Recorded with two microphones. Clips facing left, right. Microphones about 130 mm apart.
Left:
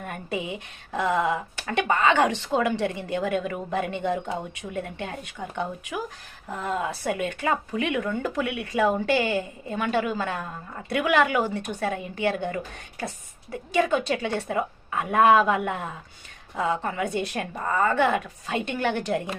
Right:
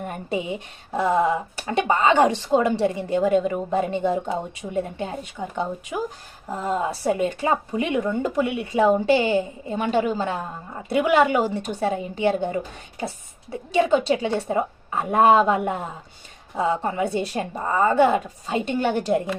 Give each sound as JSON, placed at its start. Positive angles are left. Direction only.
{"t": 0.0, "sound": "a woman's voice", "side_deg": -25}